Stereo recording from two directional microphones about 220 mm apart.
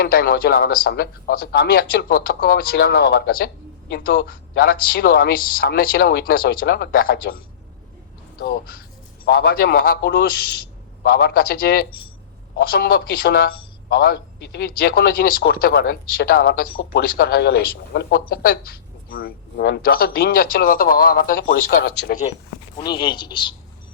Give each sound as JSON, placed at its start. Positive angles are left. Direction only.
{"t": 0.0, "sound": "a man's voice", "side_deg": 45}
{"t": 22.8, "sound": "a man's voice", "side_deg": 20}